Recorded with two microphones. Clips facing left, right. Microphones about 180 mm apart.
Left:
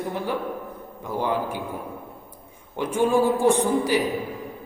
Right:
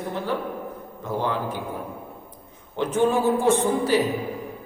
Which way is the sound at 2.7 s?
10° left (ahead or behind).